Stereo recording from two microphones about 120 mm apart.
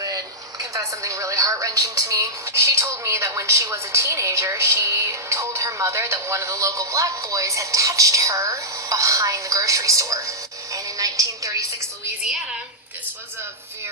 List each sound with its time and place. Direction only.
0.6 s speech: 30° right (ahead or behind)